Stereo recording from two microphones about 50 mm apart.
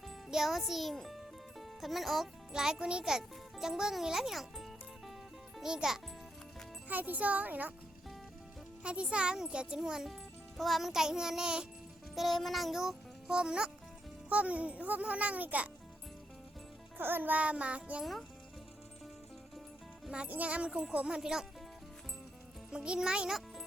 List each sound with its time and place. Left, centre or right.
0.3 s a child's voice: centre
1.0 s music: centre
2.5 s a child's voice: centre
6.8 s a child's voice: right
8.8 s a child's voice: right
10.6 s a child's voice: centre
12.1 s music: centre
13.3 s a child's voice: centre
14.3 s a child's voice: right
17.0 s a child's voice: right
17.4 s a child's voice: right
20.2 s a child's voice: right
21.2 s a child's voice: centre
22.7 s a child's voice: centre